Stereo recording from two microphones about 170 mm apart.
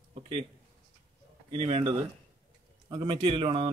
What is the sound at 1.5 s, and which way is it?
Speech, 35° right (ahead or behind).